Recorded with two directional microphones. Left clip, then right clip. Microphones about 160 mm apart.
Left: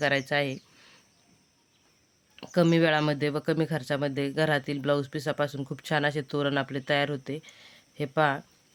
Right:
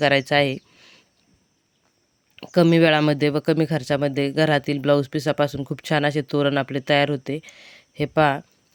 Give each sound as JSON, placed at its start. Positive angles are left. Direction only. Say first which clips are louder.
{"t": 0.0, "sound": "speech", "louder": "right 8 dB", "side_deg": -45}
{"t": 0.8, "sound": "a sound", "louder": "right 5 dB", "side_deg": -30}
{"t": 2.3, "sound": "speech", "louder": "right 7 dB", "side_deg": -35}